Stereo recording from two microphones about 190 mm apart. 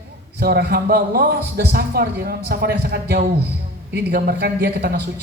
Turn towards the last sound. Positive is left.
turn(degrees=-55)  # may be behind; listen again after turning